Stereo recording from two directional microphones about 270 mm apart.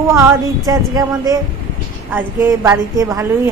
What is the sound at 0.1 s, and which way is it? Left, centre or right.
Speech, centre.